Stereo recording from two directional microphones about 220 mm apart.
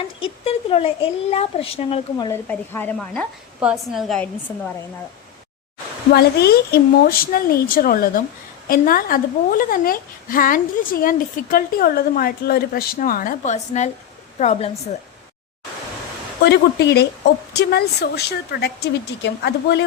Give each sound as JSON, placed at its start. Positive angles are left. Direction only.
{"t": 0.2, "sound": "a sound", "side_deg": 25}
{"t": 1.3, "sound": "a child's voice", "side_deg": 25}
{"t": 2.5, "sound": "a woman's voice", "side_deg": 5}
{"t": 6.1, "sound": "a woman's voice", "side_deg": 45}
{"t": 16.4, "sound": "a woman's voice", "side_deg": 50}